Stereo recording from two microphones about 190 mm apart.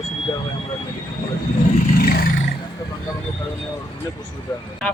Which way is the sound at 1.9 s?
55° left (ahead or behind).